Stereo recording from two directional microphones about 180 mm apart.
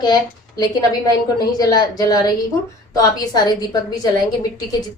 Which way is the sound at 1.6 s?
20° left (ahead or behind).